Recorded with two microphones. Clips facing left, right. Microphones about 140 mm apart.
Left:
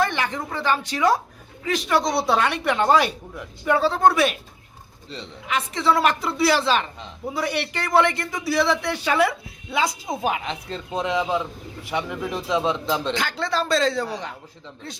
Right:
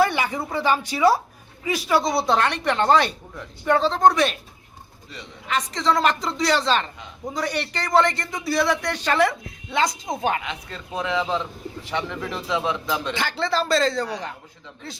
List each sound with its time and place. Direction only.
0.0 s a woman's voice: 10° right (ahead or behind); by 4.4 s 5° left (ahead or behind)
5.5 s a man's voice: 10° left (ahead or behind)
10.4 s speech: 30° left (ahead or behind)
13.1 s speech: 5° right (ahead or behind)